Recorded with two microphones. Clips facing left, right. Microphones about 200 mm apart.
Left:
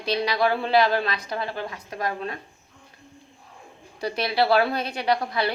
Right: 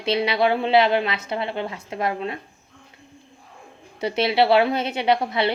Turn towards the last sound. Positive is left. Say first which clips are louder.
# right 3 dB
turn(degrees=-25)  # may be behind; listen again after turning